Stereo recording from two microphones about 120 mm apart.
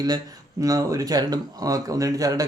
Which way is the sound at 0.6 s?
30° right (ahead or behind).